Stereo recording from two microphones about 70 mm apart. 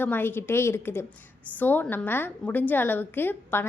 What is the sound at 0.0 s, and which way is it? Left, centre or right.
A woman's voice, left.